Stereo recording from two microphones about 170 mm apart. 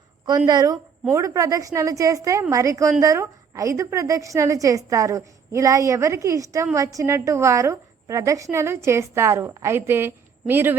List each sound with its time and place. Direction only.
0.3 s a woman's voice: 25° right (ahead or behind)